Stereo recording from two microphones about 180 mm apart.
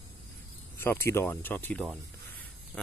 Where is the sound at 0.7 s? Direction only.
10° left (ahead or behind).